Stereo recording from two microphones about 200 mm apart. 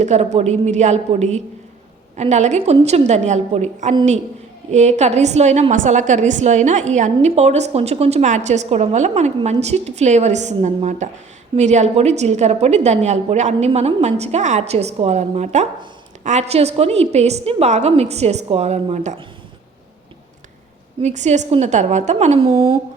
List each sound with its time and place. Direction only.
0.0 s a woman's voice: 35° right (ahead or behind)
21.0 s a woman's voice: 35° right (ahead or behind)